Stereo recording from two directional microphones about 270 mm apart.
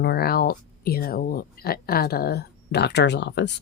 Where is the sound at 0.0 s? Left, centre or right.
Left.